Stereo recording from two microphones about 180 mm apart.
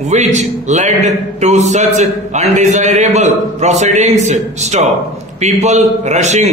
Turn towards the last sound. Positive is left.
turn(degrees=-40)  # may be behind; listen again after turning